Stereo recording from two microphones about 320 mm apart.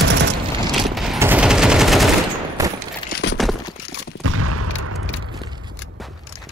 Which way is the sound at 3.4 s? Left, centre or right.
Centre.